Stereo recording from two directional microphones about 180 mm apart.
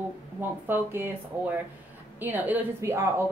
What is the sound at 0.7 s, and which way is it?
A woman's voice, 10° right (ahead or behind).